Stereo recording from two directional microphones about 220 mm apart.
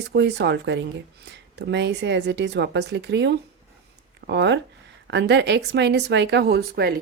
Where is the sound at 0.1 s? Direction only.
50° right (ahead or behind).